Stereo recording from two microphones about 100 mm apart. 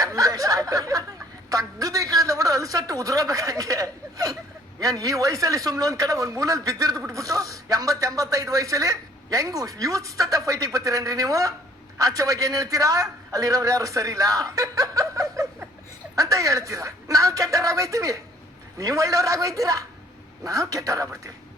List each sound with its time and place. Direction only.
0.0 s speech: 35° right (ahead or behind)
1.5 s a sound: 35° right (ahead or behind)
4.8 s a man's voice: 35° right (ahead or behind)